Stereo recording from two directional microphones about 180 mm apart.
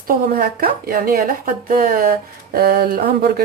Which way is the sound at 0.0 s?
55° right (ahead or behind).